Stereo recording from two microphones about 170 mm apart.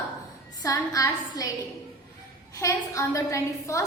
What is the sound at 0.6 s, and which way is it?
Speech, 20° left (ahead or behind).